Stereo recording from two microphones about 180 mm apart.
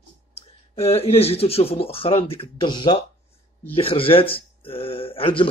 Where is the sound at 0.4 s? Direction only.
35° left (ahead or behind).